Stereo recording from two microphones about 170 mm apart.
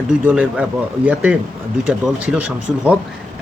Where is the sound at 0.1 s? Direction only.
5° right (ahead or behind).